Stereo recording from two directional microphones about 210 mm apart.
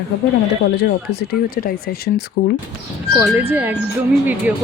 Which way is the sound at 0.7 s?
50° left (ahead or behind).